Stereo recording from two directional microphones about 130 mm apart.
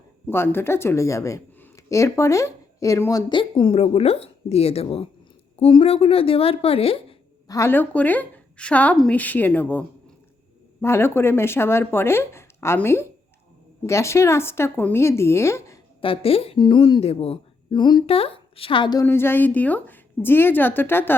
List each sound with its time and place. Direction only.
0.3 s speech: 15° left (ahead or behind); by 7.2 s 45° left (ahead or behind)
7.4 s a woman's voice: 25° left (ahead or behind)
16.0 s speech: 45° left (ahead or behind)
19.0 s a woman's voice: 15° left (ahead or behind)